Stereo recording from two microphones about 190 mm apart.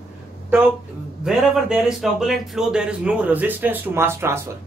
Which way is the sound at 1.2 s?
Centre (ahead or behind).